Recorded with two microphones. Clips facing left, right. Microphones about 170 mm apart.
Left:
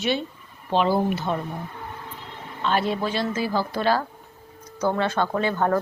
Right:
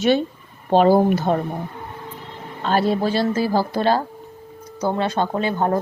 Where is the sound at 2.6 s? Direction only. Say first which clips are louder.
Right 4 dB; 40° right (ahead or behind).